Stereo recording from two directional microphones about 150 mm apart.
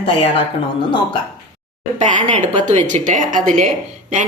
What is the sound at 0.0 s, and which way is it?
Speech, 40° left (ahead or behind).